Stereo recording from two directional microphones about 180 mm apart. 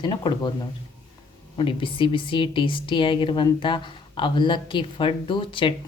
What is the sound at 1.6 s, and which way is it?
A woman's voice, 30° left (ahead or behind).